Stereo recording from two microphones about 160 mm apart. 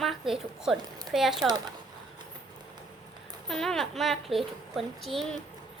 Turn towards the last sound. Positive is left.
turn(degrees=0)  # may be behind; listen again after turning